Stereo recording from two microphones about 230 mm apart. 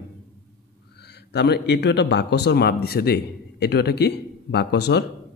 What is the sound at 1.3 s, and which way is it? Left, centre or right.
Speech, left.